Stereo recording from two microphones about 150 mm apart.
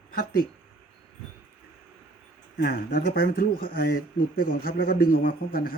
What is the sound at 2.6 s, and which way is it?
Speech, 85° left.